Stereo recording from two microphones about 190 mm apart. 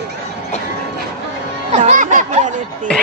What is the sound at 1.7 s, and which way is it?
Snicker, 40° right (ahead or behind).